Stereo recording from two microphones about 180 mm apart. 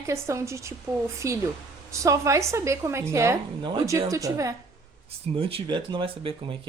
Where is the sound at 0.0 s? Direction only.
15° right (ahead or behind).